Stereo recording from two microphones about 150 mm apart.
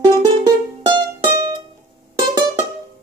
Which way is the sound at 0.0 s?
25° right (ahead or behind).